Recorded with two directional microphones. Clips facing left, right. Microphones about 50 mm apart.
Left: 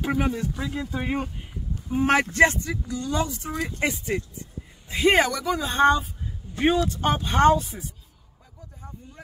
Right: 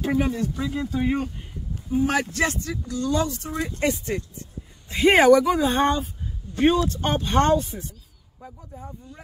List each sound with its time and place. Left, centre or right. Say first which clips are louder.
0.0 s speech: right 2 dB; centre
2.0 s speech: left 1 dB; left
2.6 s speech: right 2 dB; centre
4.9 s speech: right 5 dB; centre